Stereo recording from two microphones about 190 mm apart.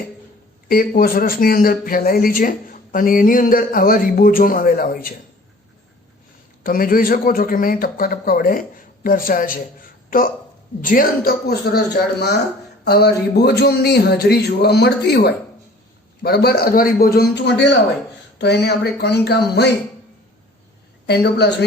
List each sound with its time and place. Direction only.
0.7 s speech: 50° left (ahead or behind)
6.6 s a woman's voice: 50° left (ahead or behind)
12.8 s speech: 60° left (ahead or behind)
21.1 s speech: 60° left (ahead or behind)